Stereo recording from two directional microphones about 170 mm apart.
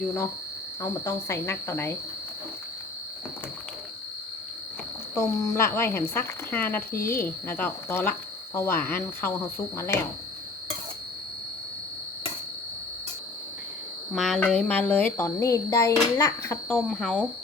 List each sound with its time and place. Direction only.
0.8 s speech: 15° left (ahead or behind)
5.1 s speech: 20° left (ahead or behind)
14.1 s speech: centre (ahead or behind)